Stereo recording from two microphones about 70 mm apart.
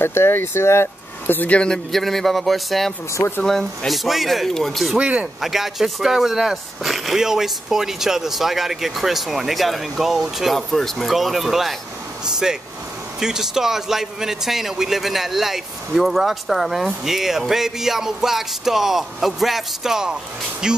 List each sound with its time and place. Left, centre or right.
0.0 s speech: left
1.6 s a man's voice: centre
4.9 s speech: centre
5.4 s a man's voice: centre